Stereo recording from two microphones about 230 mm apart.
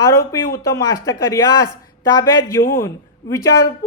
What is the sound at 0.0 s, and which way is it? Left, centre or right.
A man's voice, centre.